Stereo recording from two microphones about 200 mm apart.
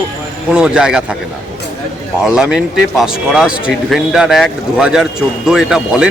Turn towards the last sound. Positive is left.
turn(degrees=-5)  # may be behind; listen again after turning